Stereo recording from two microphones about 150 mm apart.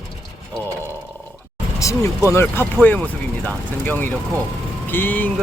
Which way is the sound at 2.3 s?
15° left (ahead or behind).